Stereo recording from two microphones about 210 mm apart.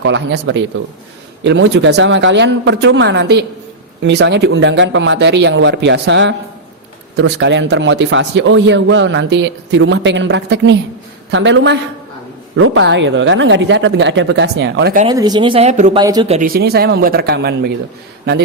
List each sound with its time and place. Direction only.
0.0 s a man's voice: 60° right (ahead or behind)
12.5 s a man's voice: 70° right (ahead or behind); by 14.9 s 55° right (ahead or behind)
15.1 s speech: 20° right (ahead or behind)
16.0 s speech: 20° right (ahead or behind)
16.3 s a man's voice: 40° right (ahead or behind)